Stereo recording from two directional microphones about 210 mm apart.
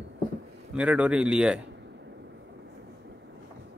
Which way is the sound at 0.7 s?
5° right (ahead or behind).